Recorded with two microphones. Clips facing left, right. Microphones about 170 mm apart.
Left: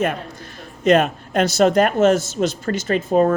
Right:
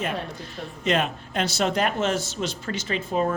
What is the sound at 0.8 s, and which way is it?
Speech, 45° left (ahead or behind).